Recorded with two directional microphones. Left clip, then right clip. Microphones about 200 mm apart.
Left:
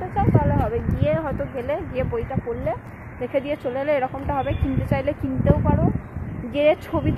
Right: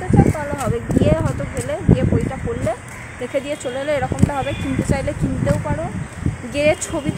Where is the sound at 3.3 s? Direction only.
5° right (ahead or behind).